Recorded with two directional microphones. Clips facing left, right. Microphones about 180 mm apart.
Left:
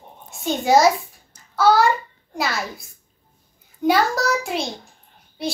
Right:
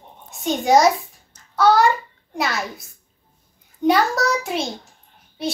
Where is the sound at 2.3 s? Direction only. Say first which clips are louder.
Right 1 dB; centre (ahead or behind).